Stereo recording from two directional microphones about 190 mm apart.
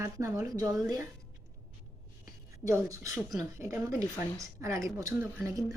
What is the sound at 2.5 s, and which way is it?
Speech, 15° right (ahead or behind).